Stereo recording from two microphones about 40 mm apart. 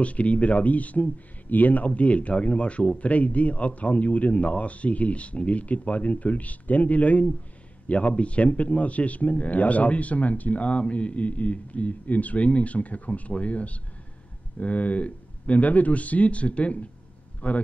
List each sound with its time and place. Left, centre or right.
0.0 s speech: left
2.0 s a man's voice: left